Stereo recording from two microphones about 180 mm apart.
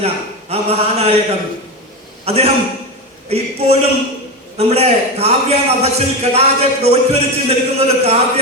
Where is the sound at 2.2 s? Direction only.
35° right (ahead or behind).